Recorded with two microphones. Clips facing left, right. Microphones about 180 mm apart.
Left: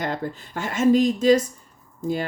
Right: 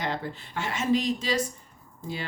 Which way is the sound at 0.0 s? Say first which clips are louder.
Left 4 dB; 45° left (ahead or behind).